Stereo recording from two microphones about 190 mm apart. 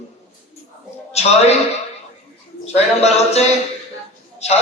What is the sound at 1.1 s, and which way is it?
Speech, 35° left (ahead or behind).